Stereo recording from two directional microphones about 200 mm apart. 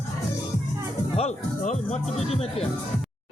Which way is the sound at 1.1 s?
30° left (ahead or behind).